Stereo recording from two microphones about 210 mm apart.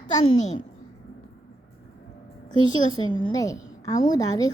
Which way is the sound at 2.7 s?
20° left (ahead or behind).